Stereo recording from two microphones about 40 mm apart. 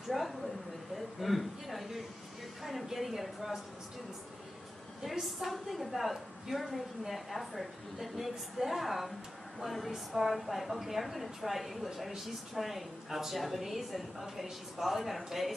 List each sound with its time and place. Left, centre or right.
0.1 s a woman's voice: centre
5.2 s a woman's voice: centre